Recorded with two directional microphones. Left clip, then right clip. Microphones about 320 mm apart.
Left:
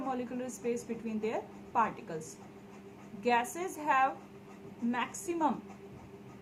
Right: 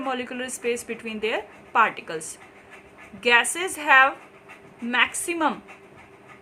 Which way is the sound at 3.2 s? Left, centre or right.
Right.